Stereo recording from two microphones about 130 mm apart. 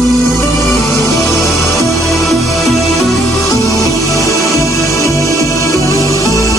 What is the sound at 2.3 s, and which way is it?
Music, centre (ahead or behind).